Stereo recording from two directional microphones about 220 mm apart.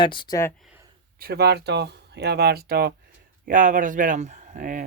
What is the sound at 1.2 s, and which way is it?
A man's voice, 45° right (ahead or behind).